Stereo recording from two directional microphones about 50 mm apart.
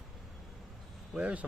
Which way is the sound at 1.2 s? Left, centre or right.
Right.